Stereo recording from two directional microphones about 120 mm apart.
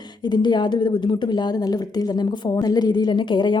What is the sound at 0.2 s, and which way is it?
A woman's voice, 40° left (ahead or behind).